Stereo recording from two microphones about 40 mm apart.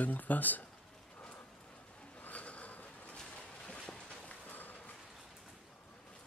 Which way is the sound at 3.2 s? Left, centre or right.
Centre.